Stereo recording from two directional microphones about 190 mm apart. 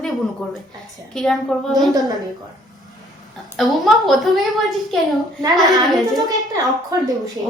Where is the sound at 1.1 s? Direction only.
Centre (ahead or behind).